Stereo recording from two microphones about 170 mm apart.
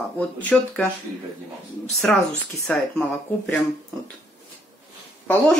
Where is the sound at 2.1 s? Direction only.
5° left (ahead or behind).